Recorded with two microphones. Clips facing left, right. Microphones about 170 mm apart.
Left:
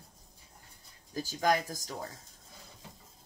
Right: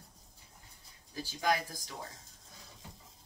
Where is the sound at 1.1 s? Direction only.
45° left (ahead or behind).